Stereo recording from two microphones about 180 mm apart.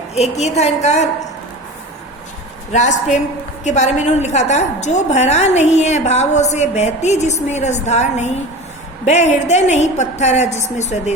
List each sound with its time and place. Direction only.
0.1 s a woman's voice: 35° left (ahead or behind)
2.7 s a woman's voice: 40° left (ahead or behind)